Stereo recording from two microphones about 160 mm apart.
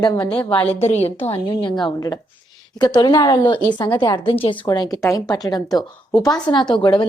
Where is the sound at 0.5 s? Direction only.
40° left (ahead or behind).